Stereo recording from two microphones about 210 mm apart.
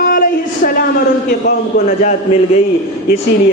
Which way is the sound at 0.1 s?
45° left (ahead or behind).